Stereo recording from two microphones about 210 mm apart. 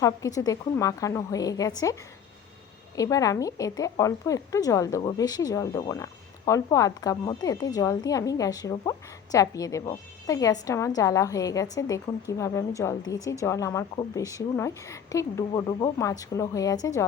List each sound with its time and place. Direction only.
0.0 s a woman's voice: 15° left (ahead or behind)
2.9 s a woman's voice: 15° left (ahead or behind)